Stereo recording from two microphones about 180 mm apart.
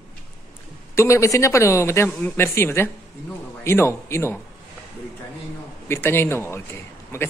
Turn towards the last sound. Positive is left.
turn(degrees=15)  # may be behind; listen again after turning